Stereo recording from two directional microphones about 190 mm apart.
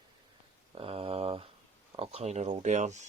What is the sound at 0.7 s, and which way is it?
Speech, 30° right (ahead or behind).